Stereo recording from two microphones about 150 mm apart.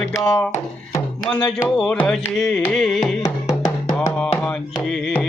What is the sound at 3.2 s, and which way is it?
Music, 25° left (ahead or behind).